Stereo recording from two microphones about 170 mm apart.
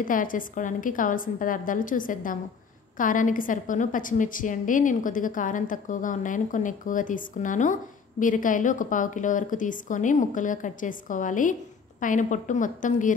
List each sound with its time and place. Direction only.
0.0 s a woman's voice: 55° left (ahead or behind)